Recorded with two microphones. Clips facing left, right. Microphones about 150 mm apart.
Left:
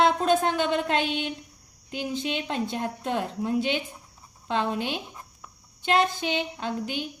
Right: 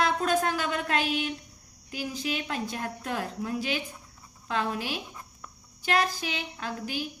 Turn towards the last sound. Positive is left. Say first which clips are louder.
# left 3 dB
turn(degrees=25)  # may be behind; listen again after turning